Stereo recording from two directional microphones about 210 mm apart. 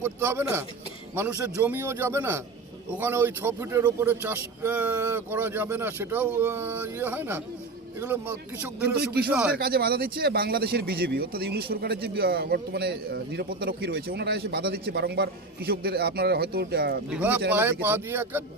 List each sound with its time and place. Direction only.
0.0 s speech: 10° right (ahead or behind)
9.6 s speech: 45° right (ahead or behind)
17.1 s speech: 5° right (ahead or behind)